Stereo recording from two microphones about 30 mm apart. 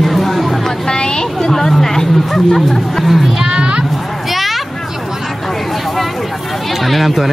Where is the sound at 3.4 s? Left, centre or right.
Right.